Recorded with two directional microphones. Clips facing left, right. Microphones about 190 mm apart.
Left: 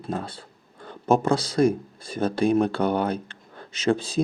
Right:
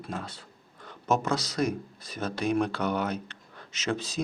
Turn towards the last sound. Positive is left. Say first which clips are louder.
# left 8 dB
turn(degrees=30)  # may be behind; listen again after turning